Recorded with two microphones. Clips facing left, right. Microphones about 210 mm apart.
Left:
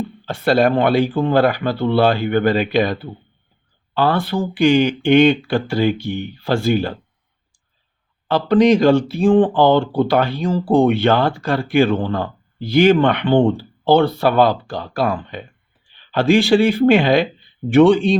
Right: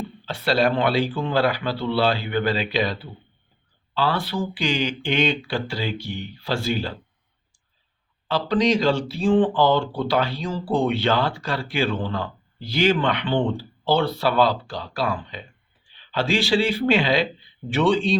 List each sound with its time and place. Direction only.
0.3 s speech: 50° left (ahead or behind)
8.3 s speech: 55° left (ahead or behind)